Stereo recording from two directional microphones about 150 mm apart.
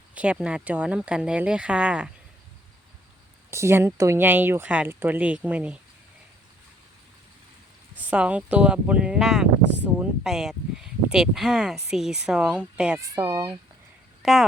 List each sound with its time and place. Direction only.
0.1 s speech: 10° right (ahead or behind)
3.5 s speech: 15° right (ahead or behind)
7.9 s speech: 10° right (ahead or behind)
13.0 s speech: 25° right (ahead or behind)
14.2 s a sound: centre (ahead or behind)